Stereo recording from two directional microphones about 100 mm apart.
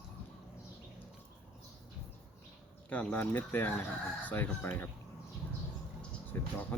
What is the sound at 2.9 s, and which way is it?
Speech, 15° left (ahead or behind).